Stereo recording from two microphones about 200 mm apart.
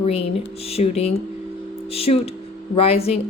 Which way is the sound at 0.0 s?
30° left (ahead or behind).